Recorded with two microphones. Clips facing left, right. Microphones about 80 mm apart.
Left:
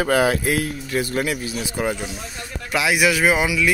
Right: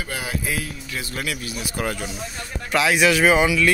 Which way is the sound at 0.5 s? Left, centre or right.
Left.